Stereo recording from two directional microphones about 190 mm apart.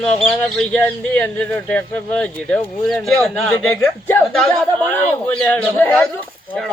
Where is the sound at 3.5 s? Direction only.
15° left (ahead or behind).